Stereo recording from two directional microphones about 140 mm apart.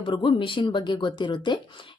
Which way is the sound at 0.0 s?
35° left (ahead or behind).